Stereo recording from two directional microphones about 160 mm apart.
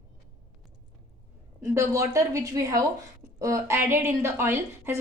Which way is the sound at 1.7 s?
20° right (ahead or behind).